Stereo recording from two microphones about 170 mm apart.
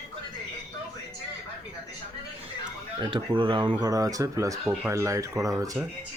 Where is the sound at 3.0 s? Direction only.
30° right (ahead or behind).